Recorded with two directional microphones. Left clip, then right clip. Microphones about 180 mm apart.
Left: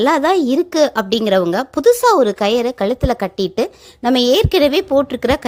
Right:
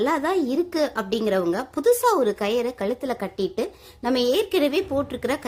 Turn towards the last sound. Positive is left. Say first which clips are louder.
# left 10 dB
turn(degrees=40)  # may be behind; listen again after turning